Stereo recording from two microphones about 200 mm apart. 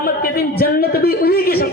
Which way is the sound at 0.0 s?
45° left (ahead or behind).